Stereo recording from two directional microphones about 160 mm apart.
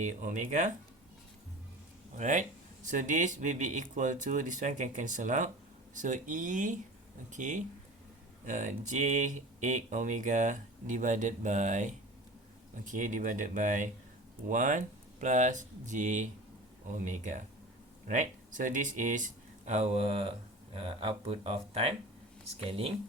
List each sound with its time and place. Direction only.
0.0 s speech: 50° right (ahead or behind)
2.1 s speech: 50° right (ahead or behind)